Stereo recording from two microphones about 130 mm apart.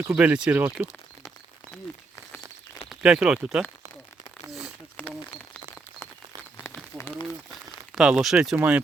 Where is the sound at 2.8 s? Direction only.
5° right (ahead or behind).